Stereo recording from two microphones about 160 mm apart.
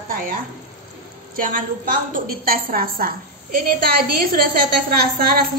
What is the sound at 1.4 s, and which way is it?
A woman's voice, 60° right (ahead or behind).